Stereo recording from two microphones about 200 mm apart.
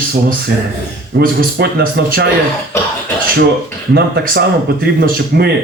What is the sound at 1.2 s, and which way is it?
Speech, 55° right (ahead or behind).